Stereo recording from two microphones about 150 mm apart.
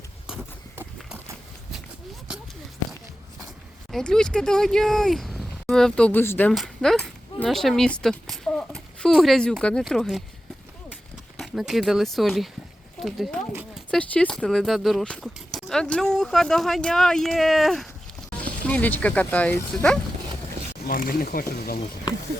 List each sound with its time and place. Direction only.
3.9 s speech: 5° left (ahead or behind)
6.5 s speech: centre (ahead or behind)
11.3 s speech: centre (ahead or behind)
18.7 s speech: 10° left (ahead or behind)
20.8 s speech: 75° left (ahead or behind)